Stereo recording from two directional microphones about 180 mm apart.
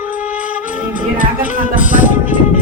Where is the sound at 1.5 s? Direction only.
45° left (ahead or behind).